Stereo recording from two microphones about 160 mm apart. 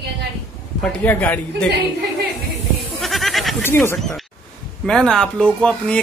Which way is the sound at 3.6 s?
15° left (ahead or behind).